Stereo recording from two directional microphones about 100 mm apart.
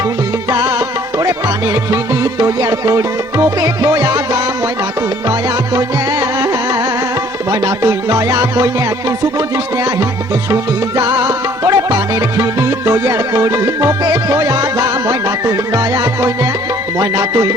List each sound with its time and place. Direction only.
0.5 s music: 45° right (ahead or behind)
10.5 s music: 40° right (ahead or behind)